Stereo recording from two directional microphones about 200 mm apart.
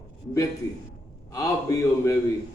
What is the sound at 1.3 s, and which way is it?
Speech, 15° left (ahead or behind).